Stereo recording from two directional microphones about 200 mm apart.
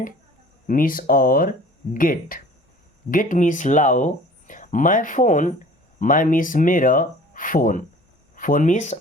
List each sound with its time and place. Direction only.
0.7 s speech: 45° left (ahead or behind)